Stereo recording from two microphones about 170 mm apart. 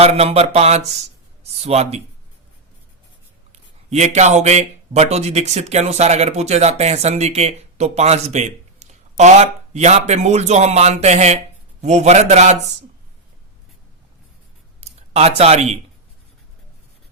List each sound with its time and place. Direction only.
0.0 s speech: 35° right (ahead or behind)
3.8 s speech: 40° right (ahead or behind)
14.8 s speech: 40° right (ahead or behind)